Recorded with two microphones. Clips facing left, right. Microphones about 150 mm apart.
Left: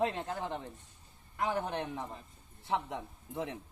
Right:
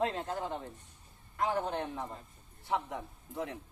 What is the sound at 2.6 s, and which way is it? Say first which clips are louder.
Speech: even; 20° left (ahead or behind).